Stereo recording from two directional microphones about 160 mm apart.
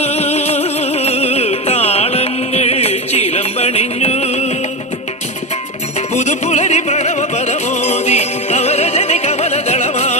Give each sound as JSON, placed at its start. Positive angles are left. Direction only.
{"t": 0.0, "sound": "music", "side_deg": 40}
{"t": 6.1, "sound": "music", "side_deg": 45}